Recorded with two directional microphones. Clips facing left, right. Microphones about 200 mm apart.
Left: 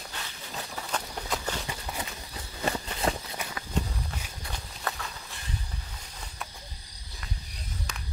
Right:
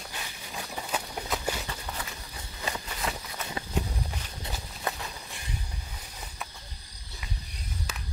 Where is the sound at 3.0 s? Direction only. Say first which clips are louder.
Left 6 dB; 30° left (ahead or behind).